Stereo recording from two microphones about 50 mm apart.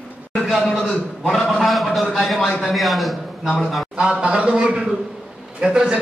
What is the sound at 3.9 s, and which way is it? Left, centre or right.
A man's voice, centre.